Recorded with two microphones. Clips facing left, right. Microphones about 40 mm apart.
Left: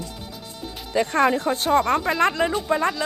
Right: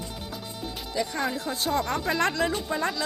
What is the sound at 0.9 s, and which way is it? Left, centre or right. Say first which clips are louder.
Speech: left 9 dB; left.